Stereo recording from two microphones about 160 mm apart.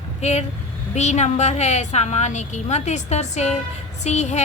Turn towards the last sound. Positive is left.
turn(degrees=45)  # may be behind; listen again after turning